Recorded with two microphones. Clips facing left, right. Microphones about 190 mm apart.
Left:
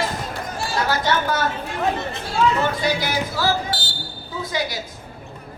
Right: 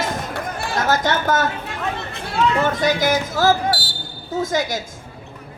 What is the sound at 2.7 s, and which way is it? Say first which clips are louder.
A woman's voice: right 4 dB; 45° right (ahead or behind).